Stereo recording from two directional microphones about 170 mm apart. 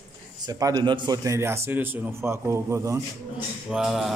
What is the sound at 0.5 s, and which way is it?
A man's voice, 20° right (ahead or behind).